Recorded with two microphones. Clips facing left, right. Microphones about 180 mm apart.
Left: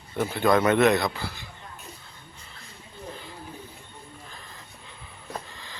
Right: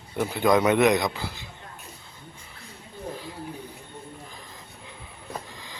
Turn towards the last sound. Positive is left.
turn(degrees=-15)  # may be behind; listen again after turning